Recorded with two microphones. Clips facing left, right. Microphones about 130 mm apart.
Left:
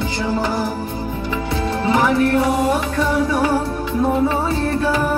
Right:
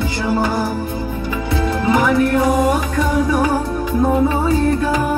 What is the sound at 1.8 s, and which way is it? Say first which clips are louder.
Music: right 1 dB; 30° left (ahead or behind).